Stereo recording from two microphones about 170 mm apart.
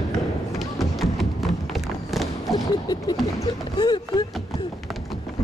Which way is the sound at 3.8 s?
25° left (ahead or behind).